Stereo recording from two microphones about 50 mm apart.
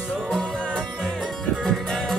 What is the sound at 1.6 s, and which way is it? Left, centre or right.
Music, centre.